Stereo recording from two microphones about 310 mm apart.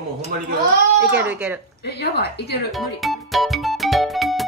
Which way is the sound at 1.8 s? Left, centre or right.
Left.